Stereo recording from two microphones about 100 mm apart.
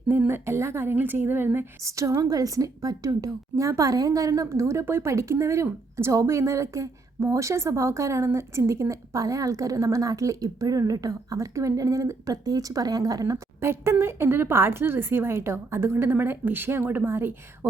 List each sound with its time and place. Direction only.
0.3 s a woman's voice: 25° right (ahead or behind)